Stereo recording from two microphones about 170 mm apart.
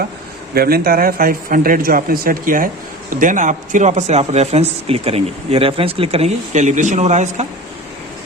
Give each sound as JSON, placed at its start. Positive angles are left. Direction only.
{"t": 0.5, "sound": "speech", "side_deg": -60}